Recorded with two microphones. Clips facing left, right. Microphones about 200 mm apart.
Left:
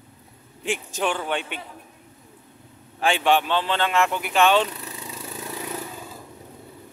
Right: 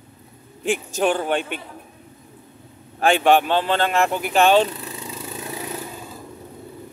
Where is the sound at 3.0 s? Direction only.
50° right (ahead or behind).